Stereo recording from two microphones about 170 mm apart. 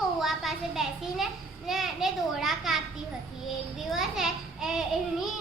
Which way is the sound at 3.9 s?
Centre (ahead or behind).